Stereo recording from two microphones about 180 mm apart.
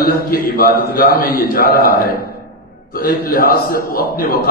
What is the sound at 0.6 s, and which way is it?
A man's voice, 55° left (ahead or behind).